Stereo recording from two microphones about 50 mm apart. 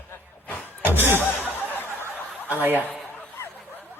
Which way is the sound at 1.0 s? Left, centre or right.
Right.